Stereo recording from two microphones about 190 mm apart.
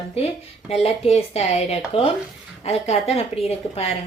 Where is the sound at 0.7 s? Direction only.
35° left (ahead or behind).